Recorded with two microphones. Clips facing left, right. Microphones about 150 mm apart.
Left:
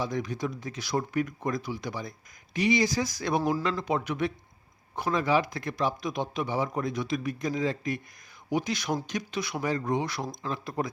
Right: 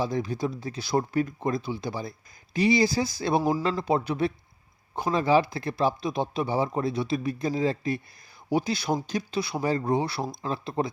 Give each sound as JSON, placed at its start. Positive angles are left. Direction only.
{"t": 0.0, "sound": "speech", "side_deg": -30}